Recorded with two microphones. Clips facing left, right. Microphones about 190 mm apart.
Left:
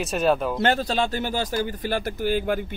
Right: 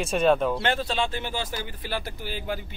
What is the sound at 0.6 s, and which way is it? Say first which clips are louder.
Speech: left 4 dB; 40° left (ahead or behind).